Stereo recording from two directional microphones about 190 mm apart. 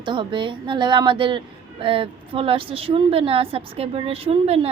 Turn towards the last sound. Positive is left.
turn(degrees=-30)  # may be behind; listen again after turning